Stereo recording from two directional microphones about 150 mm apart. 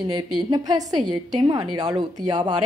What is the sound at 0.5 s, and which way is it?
A woman's voice, 25° right (ahead or behind).